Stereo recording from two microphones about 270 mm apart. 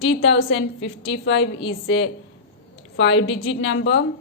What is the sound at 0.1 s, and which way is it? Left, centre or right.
A woman's voice, left.